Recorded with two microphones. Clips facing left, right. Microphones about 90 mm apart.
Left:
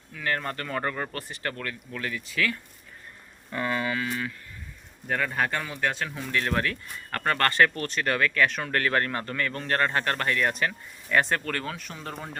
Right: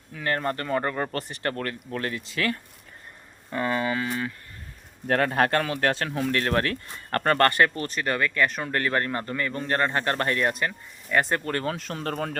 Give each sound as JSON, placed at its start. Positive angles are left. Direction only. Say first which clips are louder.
{"t": 0.1, "sound": "speech", "louder": "right 3 dB", "side_deg": -35}
{"t": 1.1, "sound": "speech", "louder": "right 4 dB", "side_deg": -40}
{"t": 3.5, "sound": "speech", "louder": "right 2 dB", "side_deg": -25}
{"t": 5.0, "sound": "a man's voice", "louder": "right 5 dB", "side_deg": -60}
{"t": 6.1, "sound": "speech", "louder": "right 4 dB", "side_deg": -50}
{"t": 7.1, "sound": "speech", "louder": "right 5 dB", "side_deg": -35}
{"t": 7.5, "sound": "speech", "louder": "even", "side_deg": -15}
{"t": 7.9, "sound": "speech", "louder": "even", "side_deg": -5}
{"t": 8.7, "sound": "speech", "louder": "even", "side_deg": -15}
{"t": 10.5, "sound": "speech", "louder": "even", "side_deg": -5}
{"t": 11.3, "sound": "speech", "louder": "right 3 dB", "side_deg": -25}
{"t": 11.9, "sound": "a man's voice", "louder": "right 7 dB", "side_deg": -60}